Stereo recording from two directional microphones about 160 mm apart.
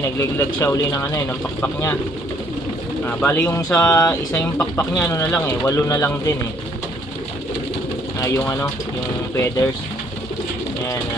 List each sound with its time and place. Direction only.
0.2 s speech: 15° left (ahead or behind)
3.1 s speech: 15° left (ahead or behind)
8.2 s speech: 20° left (ahead or behind)